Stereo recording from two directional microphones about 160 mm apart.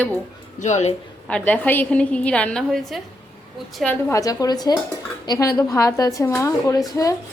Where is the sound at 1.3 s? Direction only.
10° left (ahead or behind).